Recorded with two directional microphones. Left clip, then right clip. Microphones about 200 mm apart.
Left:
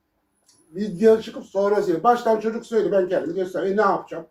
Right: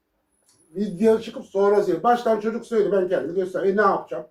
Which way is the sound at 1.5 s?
5° right (ahead or behind).